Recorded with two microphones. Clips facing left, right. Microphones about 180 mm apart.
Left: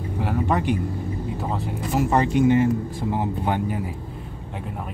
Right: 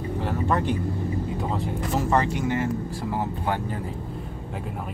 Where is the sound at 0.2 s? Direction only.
15° left (ahead or behind).